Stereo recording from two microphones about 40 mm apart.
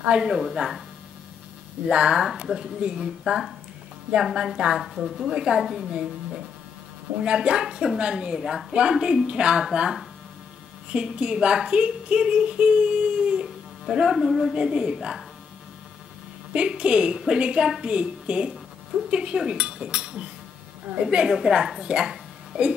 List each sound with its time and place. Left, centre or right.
0.1 s speech: right
0.4 s a woman's voice: centre
1.9 s speech: right
4.7 s a woman's voice: centre
5.3 s a woman's voice: centre
5.9 s speech: right
10.9 s speech: right
13.8 s speech: centre
14.5 s speech: right
16.5 s speech: right
21.3 s a woman's voice: centre